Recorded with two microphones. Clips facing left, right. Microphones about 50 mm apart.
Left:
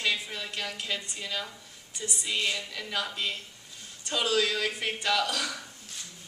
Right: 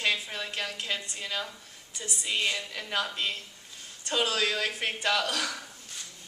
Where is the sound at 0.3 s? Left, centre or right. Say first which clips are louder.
Right 1 dB; right.